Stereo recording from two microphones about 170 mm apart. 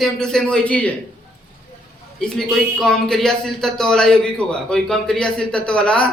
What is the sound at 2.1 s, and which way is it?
A man's voice, 5° left (ahead or behind).